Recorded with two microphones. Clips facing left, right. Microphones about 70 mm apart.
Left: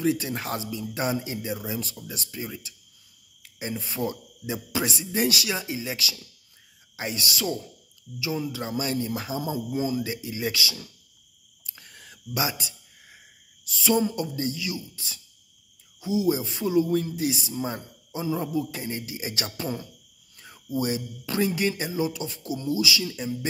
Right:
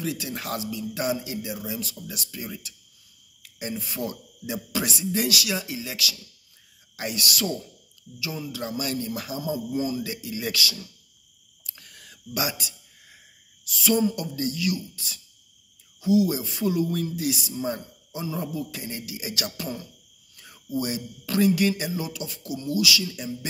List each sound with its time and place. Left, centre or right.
0.0 s speech: left
11.6 s a sound: left
13.8 s speech: left
17.5 s speech: centre
20.3 s cricket: left
20.8 s speech: left